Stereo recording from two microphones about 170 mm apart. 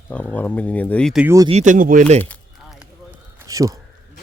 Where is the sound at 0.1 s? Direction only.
5° left (ahead or behind).